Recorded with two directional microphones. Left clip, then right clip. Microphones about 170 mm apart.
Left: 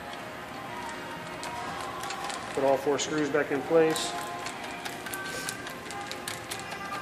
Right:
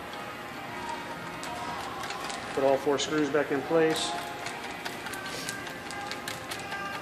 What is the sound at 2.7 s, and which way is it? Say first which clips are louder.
Speech: even; 15° left (ahead or behind).